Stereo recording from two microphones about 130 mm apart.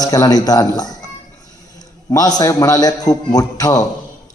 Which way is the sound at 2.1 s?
30° left (ahead or behind).